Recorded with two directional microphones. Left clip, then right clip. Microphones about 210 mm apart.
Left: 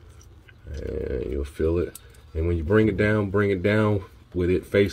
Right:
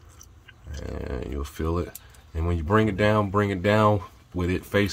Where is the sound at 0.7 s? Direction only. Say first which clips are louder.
Left 5 dB; 30° right (ahead or behind).